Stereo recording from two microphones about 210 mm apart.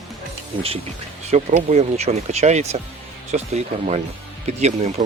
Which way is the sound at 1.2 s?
30° right (ahead or behind).